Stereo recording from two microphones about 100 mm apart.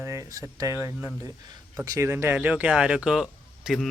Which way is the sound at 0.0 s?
30° right (ahead or behind).